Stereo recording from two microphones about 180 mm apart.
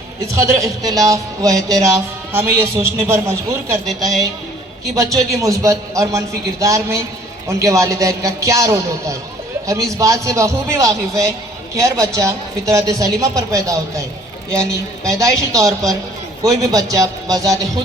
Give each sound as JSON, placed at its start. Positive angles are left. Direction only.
{"t": 0.4, "sound": "a man's voice", "side_deg": -20}
{"t": 3.8, "sound": "a woman's voice", "side_deg": 0}
{"t": 4.9, "sound": "a man's voice", "side_deg": -20}